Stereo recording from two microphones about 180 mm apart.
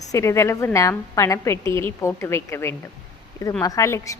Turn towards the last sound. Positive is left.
turn(degrees=15)  # may be behind; listen again after turning